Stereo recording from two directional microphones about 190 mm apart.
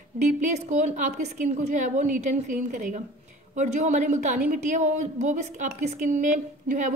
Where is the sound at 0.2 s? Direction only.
40° right (ahead or behind).